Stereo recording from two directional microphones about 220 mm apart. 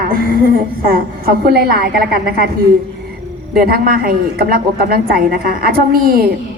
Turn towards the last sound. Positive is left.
turn(degrees=-40)  # may be behind; listen again after turning